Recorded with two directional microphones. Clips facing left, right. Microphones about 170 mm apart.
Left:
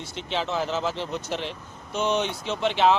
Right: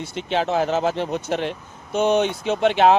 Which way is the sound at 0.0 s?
55° right (ahead or behind).